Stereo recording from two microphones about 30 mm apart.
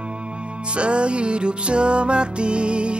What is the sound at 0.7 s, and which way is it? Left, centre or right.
Music, right.